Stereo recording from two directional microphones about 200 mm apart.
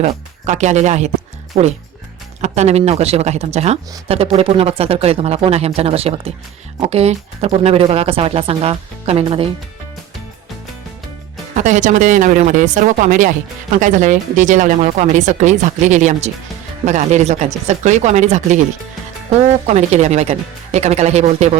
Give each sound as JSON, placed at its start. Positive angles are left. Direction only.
{"t": 0.0, "sound": "speech", "side_deg": -35}
{"t": 2.4, "sound": "speech", "side_deg": -35}
{"t": 11.5, "sound": "speech", "side_deg": -40}
{"t": 19.6, "sound": "speech", "side_deg": -35}